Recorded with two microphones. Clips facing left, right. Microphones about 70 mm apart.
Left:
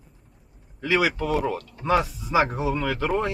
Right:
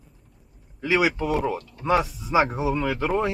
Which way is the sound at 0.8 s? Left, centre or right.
Centre.